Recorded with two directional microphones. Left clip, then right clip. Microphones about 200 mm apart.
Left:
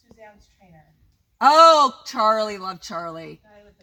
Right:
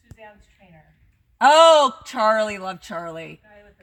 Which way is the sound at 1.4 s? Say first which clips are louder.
Even; 45° right (ahead or behind).